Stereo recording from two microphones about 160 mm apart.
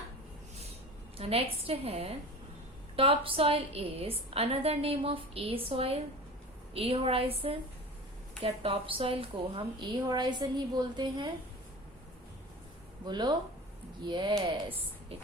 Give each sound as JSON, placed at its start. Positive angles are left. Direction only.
{"t": 1.1, "sound": "a woman's voice", "side_deg": -35}
{"t": 13.1, "sound": "a woman's voice", "side_deg": -25}